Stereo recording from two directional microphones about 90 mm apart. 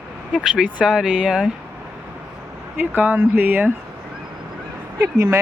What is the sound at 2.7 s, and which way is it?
Speech, 20° right (ahead or behind).